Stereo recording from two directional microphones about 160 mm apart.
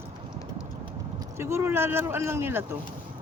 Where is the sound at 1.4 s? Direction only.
15° right (ahead or behind).